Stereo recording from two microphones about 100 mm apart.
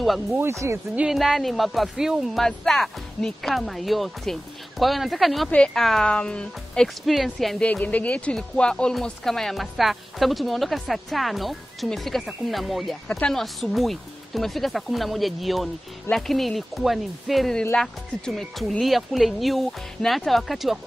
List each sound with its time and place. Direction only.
0.0 s speech: centre (ahead or behind)
0.4 s speech: 25° right (ahead or behind)
0.9 s speech: 5° right (ahead or behind)
7.6 s speech: 15° left (ahead or behind); by 20.8 s centre (ahead or behind)